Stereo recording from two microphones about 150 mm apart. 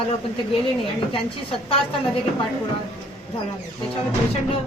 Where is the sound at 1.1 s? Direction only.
35° left (ahead or behind).